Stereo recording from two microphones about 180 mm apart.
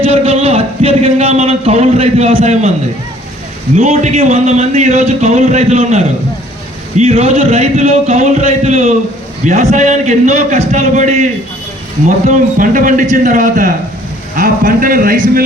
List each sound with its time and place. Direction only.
0.0 s a man's voice: 35° right (ahead or behind)
3.8 s a man's voice: 40° right (ahead or behind)